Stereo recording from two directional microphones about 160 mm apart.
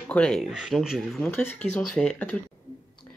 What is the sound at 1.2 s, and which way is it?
Speech, 10° left (ahead or behind).